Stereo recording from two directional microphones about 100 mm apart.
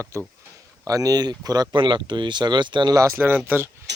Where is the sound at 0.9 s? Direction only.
35° right (ahead or behind).